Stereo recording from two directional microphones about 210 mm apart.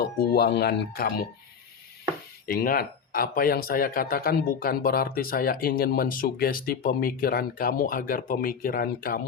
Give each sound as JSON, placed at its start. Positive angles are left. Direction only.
{"t": 0.0, "sound": "speech", "side_deg": 50}
{"t": 2.5, "sound": "speech", "side_deg": 45}